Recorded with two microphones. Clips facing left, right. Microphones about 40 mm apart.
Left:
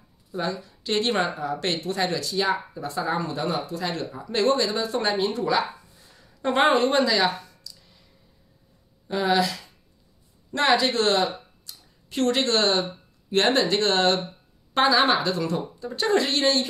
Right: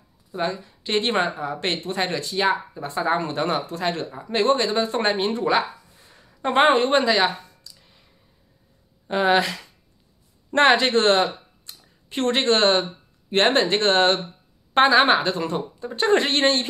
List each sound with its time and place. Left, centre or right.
0.3 s speech: right
4.1 s speech: right
6.0 s a sound: right
9.0 s speech: right